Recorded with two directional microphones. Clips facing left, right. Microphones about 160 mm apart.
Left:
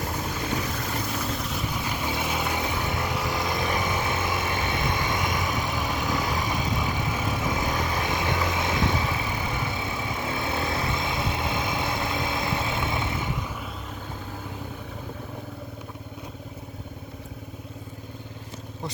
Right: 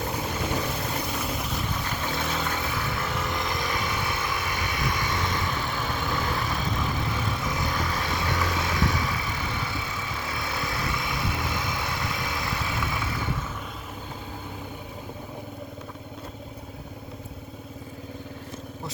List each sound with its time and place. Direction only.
1.3 s vehicle: 5° right (ahead or behind)
1.7 s vehicle: 10° left (ahead or behind)
3.3 s vehicle: 20° left (ahead or behind)